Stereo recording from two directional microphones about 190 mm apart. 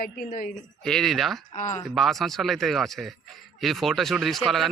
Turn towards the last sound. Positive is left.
turn(degrees=0)  # may be behind; listen again after turning